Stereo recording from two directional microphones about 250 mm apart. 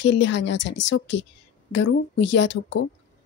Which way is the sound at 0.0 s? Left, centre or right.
Left.